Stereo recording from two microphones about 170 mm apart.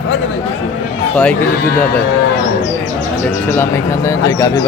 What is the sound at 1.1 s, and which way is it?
Speech, 5° left (ahead or behind).